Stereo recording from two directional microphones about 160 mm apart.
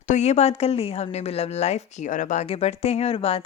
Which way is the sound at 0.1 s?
45° left (ahead or behind).